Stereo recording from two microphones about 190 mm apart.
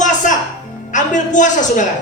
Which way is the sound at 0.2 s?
40° left (ahead or behind).